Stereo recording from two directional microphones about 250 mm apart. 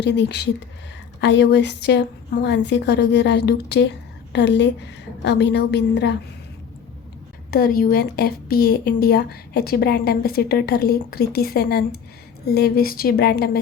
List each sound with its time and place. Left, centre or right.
0.0 s a woman's voice: left
7.5 s a woman's voice: left